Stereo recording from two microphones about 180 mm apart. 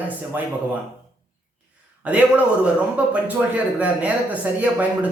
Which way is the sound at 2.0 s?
5° right (ahead or behind).